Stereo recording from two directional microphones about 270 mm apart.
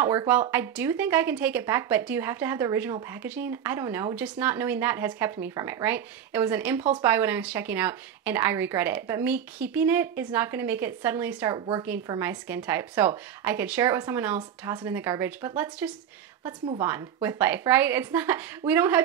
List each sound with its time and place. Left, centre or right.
0.0 s speech: centre
16.4 s a woman's voice: centre